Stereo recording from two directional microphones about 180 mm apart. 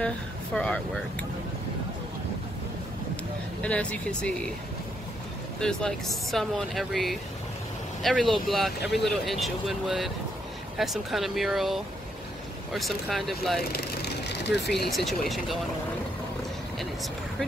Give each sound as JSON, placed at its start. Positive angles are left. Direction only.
{"t": 0.6, "sound": "speech", "side_deg": 5}
{"t": 3.6, "sound": "speech", "side_deg": 5}
{"t": 5.6, "sound": "speech", "side_deg": 5}
{"t": 13.7, "sound": "speech", "side_deg": 70}
{"t": 14.9, "sound": "speech", "side_deg": 0}